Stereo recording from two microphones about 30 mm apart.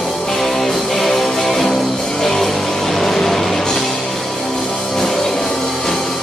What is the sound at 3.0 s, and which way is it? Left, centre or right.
Music, centre.